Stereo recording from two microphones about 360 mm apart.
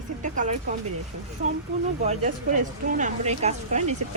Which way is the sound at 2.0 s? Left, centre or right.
Centre.